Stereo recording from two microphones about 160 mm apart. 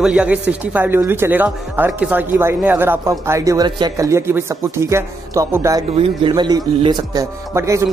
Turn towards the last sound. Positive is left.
turn(degrees=-20)  # may be behind; listen again after turning